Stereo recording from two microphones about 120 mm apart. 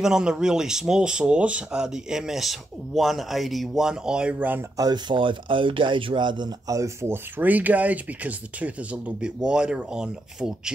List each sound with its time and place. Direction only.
0.0 s speech: 5° right (ahead or behind)
4.7 s speech: 35° right (ahead or behind); by 10.7 s 5° right (ahead or behind)